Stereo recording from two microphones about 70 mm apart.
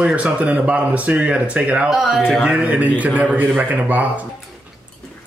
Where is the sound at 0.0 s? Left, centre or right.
Centre.